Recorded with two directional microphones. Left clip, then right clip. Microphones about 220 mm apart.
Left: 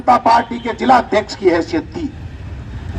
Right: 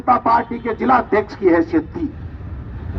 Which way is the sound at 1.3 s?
45° left (ahead or behind).